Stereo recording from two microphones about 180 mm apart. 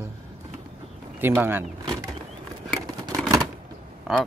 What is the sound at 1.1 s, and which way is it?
Speech, 10° right (ahead or behind).